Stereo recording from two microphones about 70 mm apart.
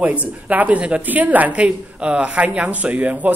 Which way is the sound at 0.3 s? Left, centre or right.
Right.